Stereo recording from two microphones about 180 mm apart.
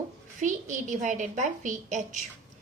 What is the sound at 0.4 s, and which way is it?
A woman's voice, 45° right (ahead or behind).